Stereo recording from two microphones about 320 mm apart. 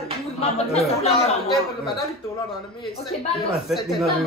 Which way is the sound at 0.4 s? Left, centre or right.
Centre.